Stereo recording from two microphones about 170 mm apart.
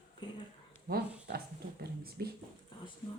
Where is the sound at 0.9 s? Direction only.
55° right (ahead or behind).